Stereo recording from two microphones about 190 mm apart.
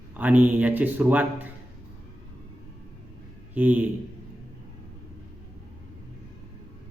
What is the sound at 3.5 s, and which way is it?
Speech, 10° right (ahead or behind).